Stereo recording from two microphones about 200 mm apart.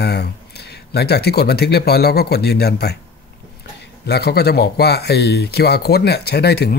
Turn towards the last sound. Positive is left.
turn(degrees=50)  # may be behind; listen again after turning